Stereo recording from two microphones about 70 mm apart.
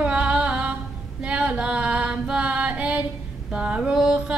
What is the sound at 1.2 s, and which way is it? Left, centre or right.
Female singing, centre.